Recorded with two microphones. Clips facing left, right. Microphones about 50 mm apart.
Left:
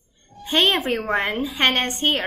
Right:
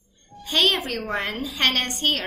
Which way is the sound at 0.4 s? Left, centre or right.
Left.